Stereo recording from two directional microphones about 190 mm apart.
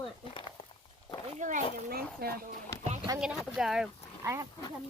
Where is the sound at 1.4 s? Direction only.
40° right (ahead or behind).